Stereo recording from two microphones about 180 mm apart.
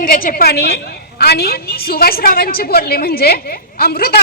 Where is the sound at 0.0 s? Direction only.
50° left (ahead or behind).